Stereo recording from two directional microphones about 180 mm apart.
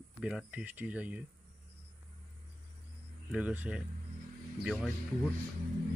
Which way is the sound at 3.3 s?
10° right (ahead or behind).